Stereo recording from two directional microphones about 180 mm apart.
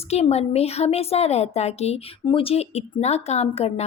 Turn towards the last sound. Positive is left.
turn(degrees=35)  # may be behind; listen again after turning